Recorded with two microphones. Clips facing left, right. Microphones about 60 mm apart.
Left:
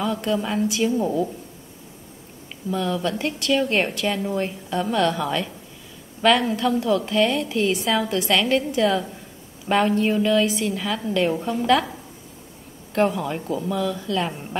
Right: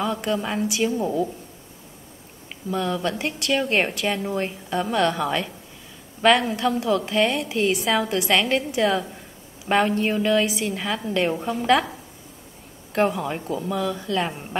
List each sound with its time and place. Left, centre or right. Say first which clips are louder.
0.0 s a woman's voice: left 1 dB; centre
2.7 s a woman's voice: left 1 dB; centre
12.9 s a woman's voice: left 1 dB; centre